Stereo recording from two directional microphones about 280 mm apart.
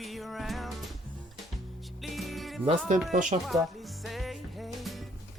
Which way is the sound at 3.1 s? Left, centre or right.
Right.